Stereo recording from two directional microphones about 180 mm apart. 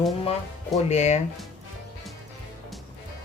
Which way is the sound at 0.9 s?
40° left (ahead or behind).